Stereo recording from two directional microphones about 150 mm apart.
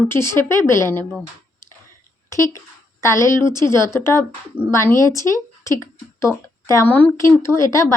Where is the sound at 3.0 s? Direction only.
20° left (ahead or behind).